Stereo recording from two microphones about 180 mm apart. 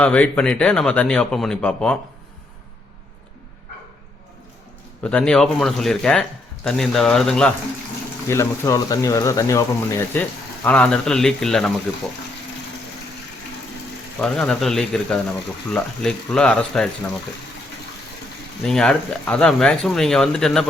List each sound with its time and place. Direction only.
0.0 s speech: 5° left (ahead or behind)
5.0 s speech: 5° left (ahead or behind)
8.3 s speech: 15° left (ahead or behind)
14.2 s speech: 5° left (ahead or behind)
18.6 s speech: 5° left (ahead or behind)